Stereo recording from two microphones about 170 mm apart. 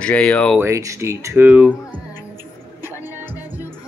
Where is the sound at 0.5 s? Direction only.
15° right (ahead or behind).